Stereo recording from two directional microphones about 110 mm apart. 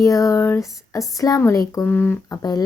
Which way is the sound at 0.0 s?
30° left (ahead or behind).